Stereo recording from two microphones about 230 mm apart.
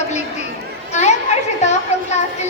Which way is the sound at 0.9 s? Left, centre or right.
Left.